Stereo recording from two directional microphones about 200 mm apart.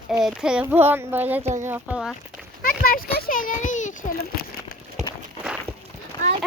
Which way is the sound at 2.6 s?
45° left (ahead or behind).